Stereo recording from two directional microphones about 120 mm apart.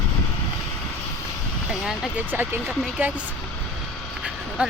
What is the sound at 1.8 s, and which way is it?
Speech, 5° right (ahead or behind).